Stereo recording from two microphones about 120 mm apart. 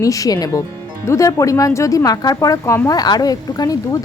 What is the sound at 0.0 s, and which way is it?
Speech, 30° left (ahead or behind).